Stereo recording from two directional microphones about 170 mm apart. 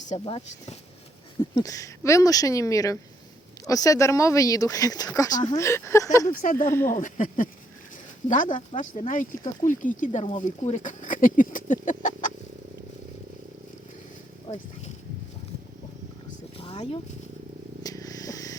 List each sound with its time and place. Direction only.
0.3 s speech: 30° left (ahead or behind)
1.5 s speech: 20° left (ahead or behind)
6.2 s speech: 55° left (ahead or behind)
6.7 s speech: 15° left (ahead or behind)
6.9 s speech: 50° left (ahead or behind)
14.5 s speech: 35° left (ahead or behind)
16.6 s a sound: 35° left (ahead or behind)
17.8 s vehicle: 20° left (ahead or behind)